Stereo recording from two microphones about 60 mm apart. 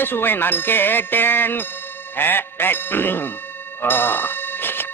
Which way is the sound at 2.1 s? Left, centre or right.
Left.